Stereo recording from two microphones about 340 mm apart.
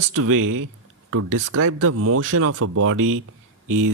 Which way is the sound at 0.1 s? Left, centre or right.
Right.